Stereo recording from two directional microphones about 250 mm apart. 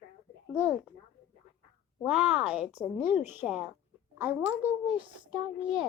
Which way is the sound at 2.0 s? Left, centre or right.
Centre.